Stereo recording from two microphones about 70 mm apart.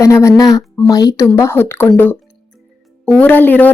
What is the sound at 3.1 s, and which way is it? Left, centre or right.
Speech, left.